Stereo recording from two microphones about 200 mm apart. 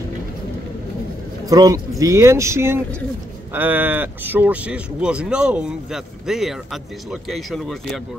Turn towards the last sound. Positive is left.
turn(degrees=0)  # may be behind; listen again after turning